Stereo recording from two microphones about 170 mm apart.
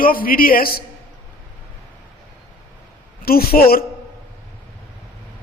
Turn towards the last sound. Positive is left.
turn(degrees=60)  # may be behind; listen again after turning